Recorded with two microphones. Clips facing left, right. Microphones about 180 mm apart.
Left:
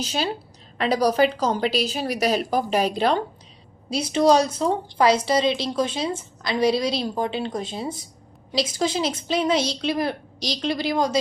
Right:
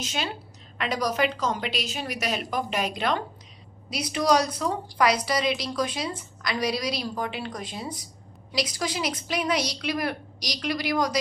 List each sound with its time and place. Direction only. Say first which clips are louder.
0.0 s a woman's voice: left 5 dB; 35° left (ahead or behind)